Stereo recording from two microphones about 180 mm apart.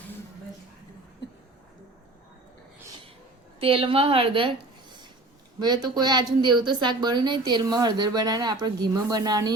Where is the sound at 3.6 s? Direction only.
30° right (ahead or behind).